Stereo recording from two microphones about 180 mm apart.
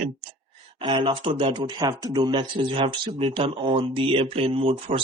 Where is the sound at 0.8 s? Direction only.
25° right (ahead or behind).